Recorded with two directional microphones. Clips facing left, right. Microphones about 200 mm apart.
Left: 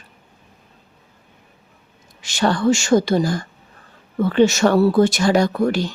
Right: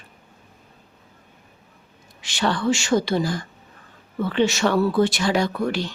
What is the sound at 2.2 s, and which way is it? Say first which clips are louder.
Speech: left 5 dB; 45° left (ahead or behind).